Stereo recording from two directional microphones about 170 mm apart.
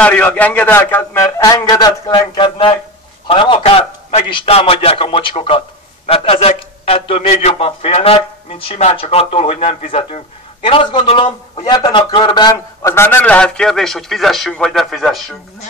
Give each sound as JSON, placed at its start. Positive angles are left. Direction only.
{"t": 0.0, "sound": "a man's voice", "side_deg": 10}
{"t": 12.5, "sound": "a man's voice", "side_deg": 15}